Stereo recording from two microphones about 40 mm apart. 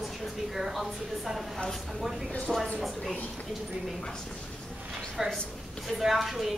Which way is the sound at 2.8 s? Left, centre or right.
Centre.